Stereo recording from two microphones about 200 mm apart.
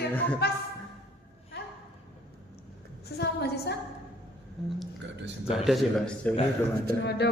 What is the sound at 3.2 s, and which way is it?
Speech, 55° left (ahead or behind).